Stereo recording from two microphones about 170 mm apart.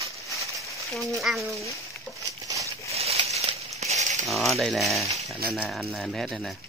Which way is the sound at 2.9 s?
35° right (ahead or behind).